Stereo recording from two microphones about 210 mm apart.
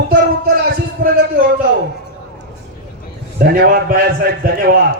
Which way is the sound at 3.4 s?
45° right (ahead or behind).